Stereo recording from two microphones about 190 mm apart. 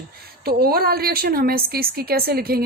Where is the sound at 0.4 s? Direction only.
50° right (ahead or behind).